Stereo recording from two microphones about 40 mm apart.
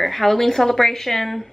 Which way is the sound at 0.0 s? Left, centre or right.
Centre.